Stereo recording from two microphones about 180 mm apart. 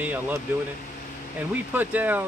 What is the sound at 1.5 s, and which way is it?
Speech, 10° right (ahead or behind).